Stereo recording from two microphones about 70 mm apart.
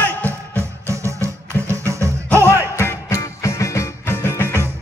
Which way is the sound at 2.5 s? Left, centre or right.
Left.